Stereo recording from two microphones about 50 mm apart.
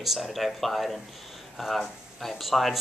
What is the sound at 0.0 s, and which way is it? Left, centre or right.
Speech, centre.